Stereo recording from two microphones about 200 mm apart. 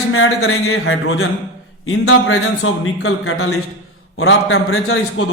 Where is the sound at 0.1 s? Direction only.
90° left.